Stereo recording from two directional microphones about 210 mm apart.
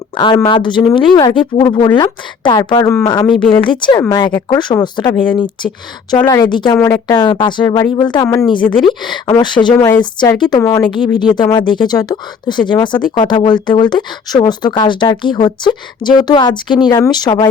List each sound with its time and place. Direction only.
0.1 s speech: 20° left (ahead or behind)
4.3 s speech: 10° left (ahead or behind)
4.5 s speech: 20° left (ahead or behind)